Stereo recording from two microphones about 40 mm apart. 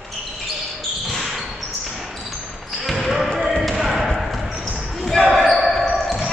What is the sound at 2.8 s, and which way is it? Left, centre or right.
Basketball bounce, centre.